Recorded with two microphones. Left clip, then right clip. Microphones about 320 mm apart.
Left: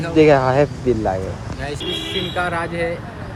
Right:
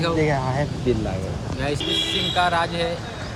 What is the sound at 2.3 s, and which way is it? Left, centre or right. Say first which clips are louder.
Speech: right 2 dB; centre.